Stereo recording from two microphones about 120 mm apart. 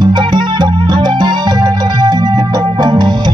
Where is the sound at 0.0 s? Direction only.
40° right (ahead or behind).